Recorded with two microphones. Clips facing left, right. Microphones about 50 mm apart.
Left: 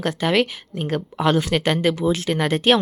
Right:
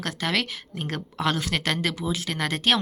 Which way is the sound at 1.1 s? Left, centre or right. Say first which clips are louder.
Left 6 dB; centre.